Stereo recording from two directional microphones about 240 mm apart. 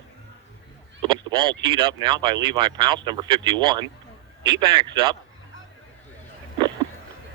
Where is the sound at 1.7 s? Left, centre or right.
Centre.